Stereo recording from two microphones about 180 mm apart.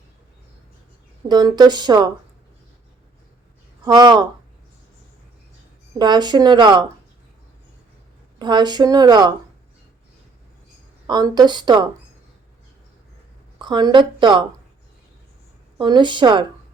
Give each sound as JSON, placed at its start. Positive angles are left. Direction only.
{"t": 1.3, "sound": "speech", "side_deg": -25}
{"t": 3.8, "sound": "speech", "side_deg": -25}
{"t": 6.0, "sound": "speech", "side_deg": -25}
{"t": 8.4, "sound": "speech", "side_deg": -25}
{"t": 11.0, "sound": "speech", "side_deg": -25}
{"t": 13.6, "sound": "speech", "side_deg": -25}
{"t": 15.8, "sound": "speech", "side_deg": -25}